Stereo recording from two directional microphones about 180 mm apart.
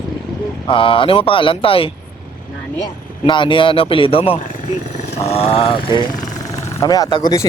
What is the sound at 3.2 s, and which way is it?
Speech, 30° left (ahead or behind).